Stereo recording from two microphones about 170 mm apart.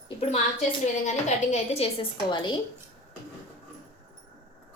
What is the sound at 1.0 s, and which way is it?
A woman's voice, 40° left (ahead or behind).